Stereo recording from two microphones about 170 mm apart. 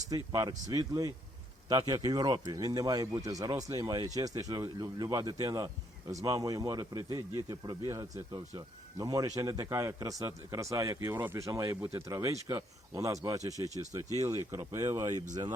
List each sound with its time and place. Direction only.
0.1 s speech: 25° right (ahead or behind)